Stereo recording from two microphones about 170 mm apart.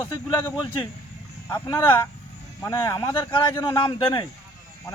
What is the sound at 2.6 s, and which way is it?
Speech, 20° left (ahead or behind).